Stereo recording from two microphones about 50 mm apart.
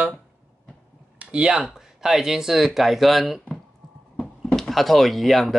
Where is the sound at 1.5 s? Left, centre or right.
Centre.